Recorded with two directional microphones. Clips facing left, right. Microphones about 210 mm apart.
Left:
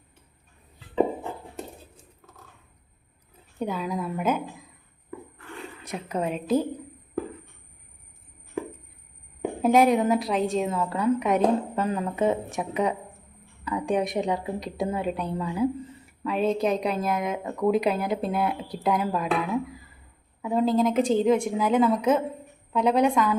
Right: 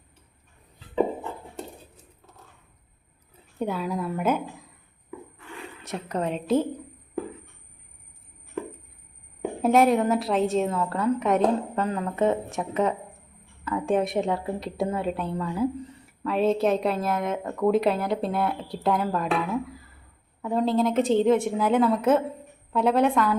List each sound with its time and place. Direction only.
3.6 s speech: 5° right (ahead or behind)
5.8 s speech: centre (ahead or behind)
9.4 s speech: centre (ahead or behind)
11.7 s speech: 15° left (ahead or behind)
13.8 s speech: centre (ahead or behind)
15.4 s speech: 10° left (ahead or behind)
20.4 s speech: 5° left (ahead or behind)